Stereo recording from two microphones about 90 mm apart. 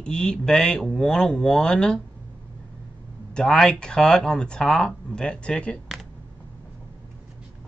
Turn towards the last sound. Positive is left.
turn(degrees=15)  # may be behind; listen again after turning